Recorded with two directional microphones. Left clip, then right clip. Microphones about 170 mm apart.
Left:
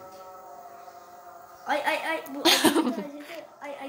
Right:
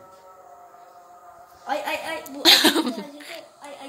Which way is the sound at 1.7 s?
45° right (ahead or behind).